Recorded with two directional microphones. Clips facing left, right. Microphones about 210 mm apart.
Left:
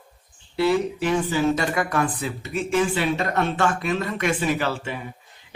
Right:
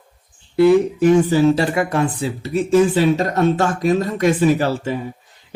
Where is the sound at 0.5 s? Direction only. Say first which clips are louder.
Right 8 dB; 50° right (ahead or behind).